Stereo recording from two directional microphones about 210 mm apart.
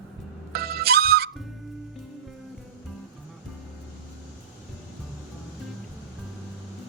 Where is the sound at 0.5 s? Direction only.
50° right (ahead or behind).